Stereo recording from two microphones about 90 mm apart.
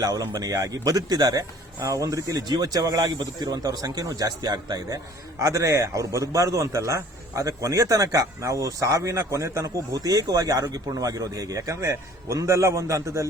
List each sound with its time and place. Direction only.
0.0 s a man's voice: 40° right (ahead or behind)
5.4 s a man's voice: 35° right (ahead or behind)